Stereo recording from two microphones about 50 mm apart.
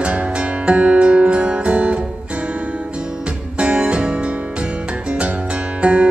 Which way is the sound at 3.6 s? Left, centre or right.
Right.